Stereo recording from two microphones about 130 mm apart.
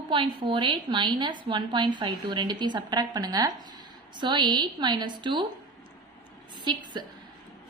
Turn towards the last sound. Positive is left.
turn(degrees=-35)  # may be behind; listen again after turning